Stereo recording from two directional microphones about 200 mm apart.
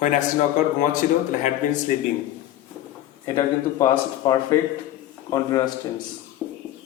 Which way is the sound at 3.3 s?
20° left (ahead or behind).